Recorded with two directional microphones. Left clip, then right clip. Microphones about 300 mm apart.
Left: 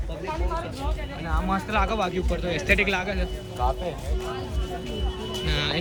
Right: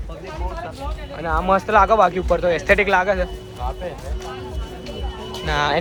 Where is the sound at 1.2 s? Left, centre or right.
Right.